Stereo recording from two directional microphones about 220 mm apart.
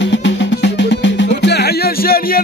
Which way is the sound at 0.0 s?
55° left (ahead or behind).